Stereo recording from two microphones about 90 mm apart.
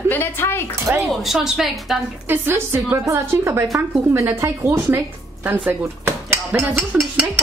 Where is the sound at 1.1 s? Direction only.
Centre (ahead or behind).